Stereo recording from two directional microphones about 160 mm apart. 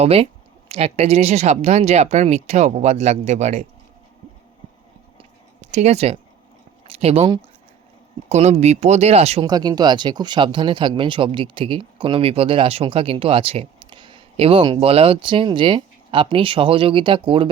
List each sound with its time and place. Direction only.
0.0 s speech: 40° right (ahead or behind)
5.1 s a sound: 45° right (ahead or behind)
6.8 s speech: 40° right (ahead or behind)
9.5 s speech: 25° right (ahead or behind)